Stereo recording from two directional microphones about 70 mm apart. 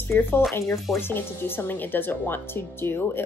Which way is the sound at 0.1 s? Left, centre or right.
Left.